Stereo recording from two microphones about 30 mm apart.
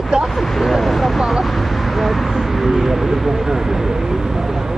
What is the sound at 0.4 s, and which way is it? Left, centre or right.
Speech, centre.